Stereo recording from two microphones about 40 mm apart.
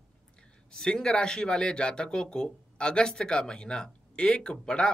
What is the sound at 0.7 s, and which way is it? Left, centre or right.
Speech, centre.